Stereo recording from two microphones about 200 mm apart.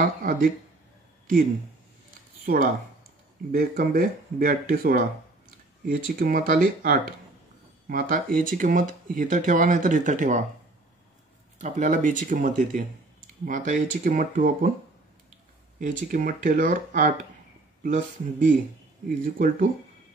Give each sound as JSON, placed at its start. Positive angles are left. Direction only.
{"t": 0.0, "sound": "speech", "side_deg": -45}
{"t": 2.4, "sound": "speech", "side_deg": -45}
{"t": 11.6, "sound": "speech", "side_deg": -40}
{"t": 15.8, "sound": "speech", "side_deg": -45}